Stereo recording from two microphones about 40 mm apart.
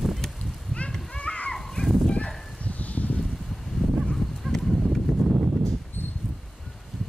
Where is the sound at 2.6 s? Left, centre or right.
Left.